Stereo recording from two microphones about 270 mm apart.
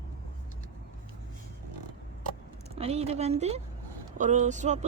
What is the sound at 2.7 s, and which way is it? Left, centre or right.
Speech, right.